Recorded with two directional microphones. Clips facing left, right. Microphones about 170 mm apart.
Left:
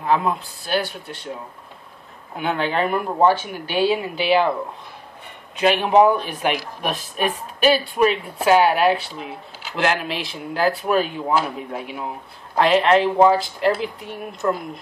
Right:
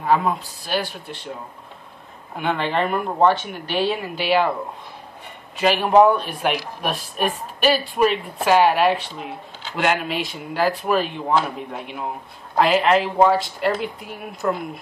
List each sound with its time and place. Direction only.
0.1 s speech: centre (ahead or behind)
2.3 s speech: centre (ahead or behind)
5.6 s speech: centre (ahead or behind)